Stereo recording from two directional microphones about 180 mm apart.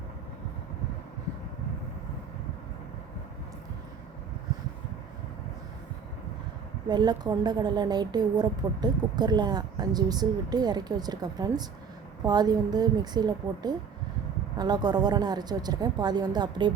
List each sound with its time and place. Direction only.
6.8 s a woman's voice: 25° right (ahead or behind)